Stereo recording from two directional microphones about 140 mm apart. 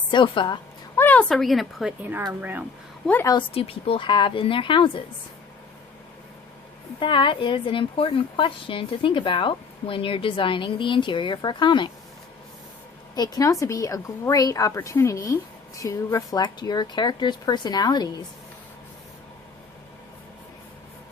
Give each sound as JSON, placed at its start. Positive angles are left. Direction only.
{"t": 0.1, "sound": "a woman's voice", "side_deg": 35}
{"t": 0.9, "sound": "a woman's voice", "side_deg": 10}
{"t": 2.4, "sound": "speech", "side_deg": -10}
{"t": 3.5, "sound": "a woman's voice", "side_deg": 45}
{"t": 7.0, "sound": "a woman's voice", "side_deg": 35}
{"t": 13.1, "sound": "speech", "side_deg": 30}